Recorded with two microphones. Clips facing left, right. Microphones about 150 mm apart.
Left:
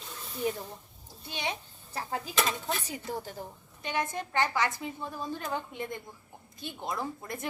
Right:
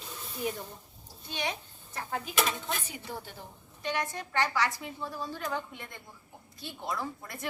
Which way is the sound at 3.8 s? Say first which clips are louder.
Left 1 dB; 20° left (ahead or behind).